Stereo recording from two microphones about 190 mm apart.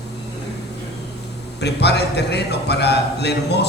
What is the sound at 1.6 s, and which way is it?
A man's voice, 60° left (ahead or behind).